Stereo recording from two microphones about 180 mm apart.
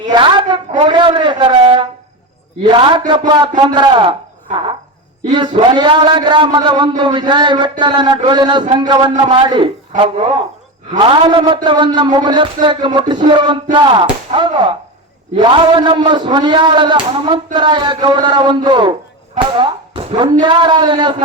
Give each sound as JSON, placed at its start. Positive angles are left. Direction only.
{"t": 0.1, "sound": "a sound", "side_deg": -25}
{"t": 0.8, "sound": "a man's voice", "side_deg": -25}
{"t": 5.3, "sound": "a man's voice", "side_deg": -25}
{"t": 10.9, "sound": "a man's voice", "side_deg": -25}